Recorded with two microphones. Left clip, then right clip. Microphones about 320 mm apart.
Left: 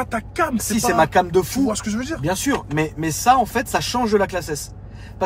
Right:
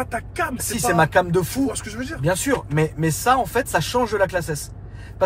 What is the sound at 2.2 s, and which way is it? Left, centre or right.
Speech, centre.